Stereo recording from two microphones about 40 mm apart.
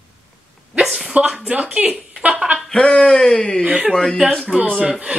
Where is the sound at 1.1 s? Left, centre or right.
Centre.